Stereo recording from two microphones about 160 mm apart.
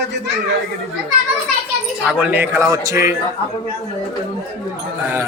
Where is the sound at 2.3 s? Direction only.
15° right (ahead or behind).